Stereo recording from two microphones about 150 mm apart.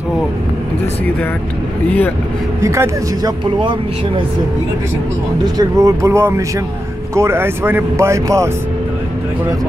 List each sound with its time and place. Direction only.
1.9 s speech: 10° left (ahead or behind)
2.6 s a man's voice: 20° right (ahead or behind)
5.4 s a man's voice: 25° right (ahead or behind)